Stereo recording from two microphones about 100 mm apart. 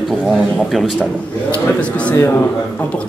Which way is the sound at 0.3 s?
Centre (ahead or behind).